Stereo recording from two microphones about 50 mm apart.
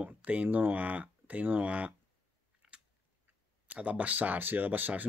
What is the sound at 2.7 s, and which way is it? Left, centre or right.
Chewing, centre.